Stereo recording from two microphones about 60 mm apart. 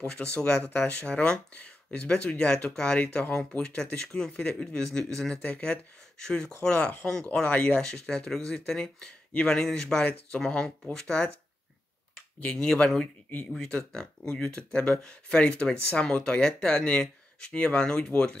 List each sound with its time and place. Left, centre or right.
0.0 s speech: centre
2.0 s speech: centre
7.4 s speech: left
12.4 s speech: centre